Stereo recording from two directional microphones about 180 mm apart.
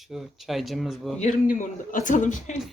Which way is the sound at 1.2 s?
45° left (ahead or behind).